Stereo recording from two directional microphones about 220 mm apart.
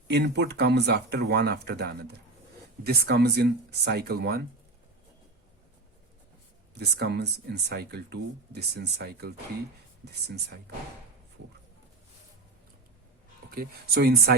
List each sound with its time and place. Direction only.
0.1 s speech: 50° right (ahead or behind)
6.7 s speech: 50° right (ahead or behind)
13.5 s speech: 45° right (ahead or behind)